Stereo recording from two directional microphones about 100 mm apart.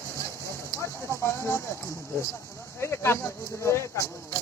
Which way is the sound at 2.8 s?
25° left (ahead or behind).